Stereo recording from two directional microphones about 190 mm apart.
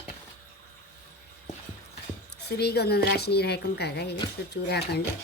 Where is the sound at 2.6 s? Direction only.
60° left (ahead or behind).